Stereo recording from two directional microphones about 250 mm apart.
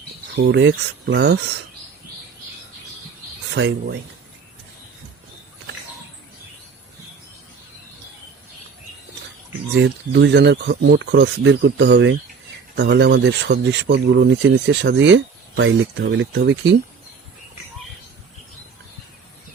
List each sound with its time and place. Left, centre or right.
0.4 s speech: right
3.5 s speech: right
9.8 s speech: right